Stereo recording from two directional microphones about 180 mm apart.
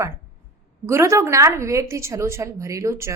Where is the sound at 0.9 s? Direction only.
15° right (ahead or behind).